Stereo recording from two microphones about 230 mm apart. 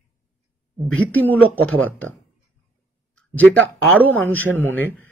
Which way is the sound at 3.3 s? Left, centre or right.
Centre.